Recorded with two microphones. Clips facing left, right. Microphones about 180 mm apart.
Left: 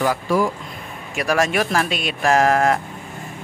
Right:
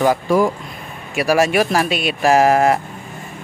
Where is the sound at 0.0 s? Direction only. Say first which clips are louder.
Right 4 dB; 20° right (ahead or behind).